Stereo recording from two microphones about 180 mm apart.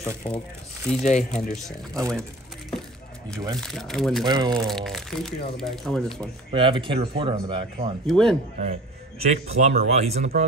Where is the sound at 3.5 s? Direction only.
Centre (ahead or behind).